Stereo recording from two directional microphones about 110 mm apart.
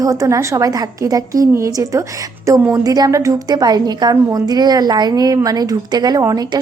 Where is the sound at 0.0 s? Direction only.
30° right (ahead or behind).